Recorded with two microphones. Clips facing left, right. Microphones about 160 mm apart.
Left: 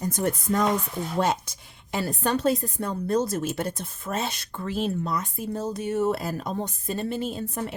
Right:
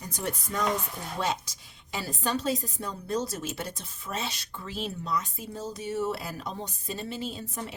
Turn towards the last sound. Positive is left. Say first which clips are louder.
# left 6 dB
turn(degrees=55)  # may be behind; listen again after turning